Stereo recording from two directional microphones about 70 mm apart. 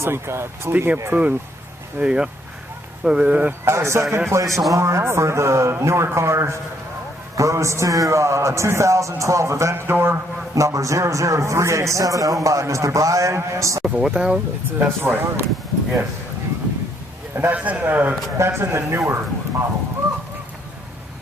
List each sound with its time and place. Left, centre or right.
0.0 s speech: right
0.7 s speech: right
3.6 s a man's voice: right
10.5 s a man's voice: right
13.8 s speech: centre
14.8 s speech: right
17.3 s speech: right
18.3 s speech: right